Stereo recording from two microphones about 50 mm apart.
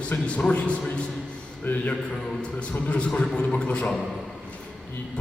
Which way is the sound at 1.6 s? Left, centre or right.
Left.